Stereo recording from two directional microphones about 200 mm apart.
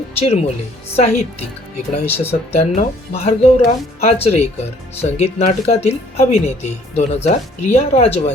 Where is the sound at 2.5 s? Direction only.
30° left (ahead or behind).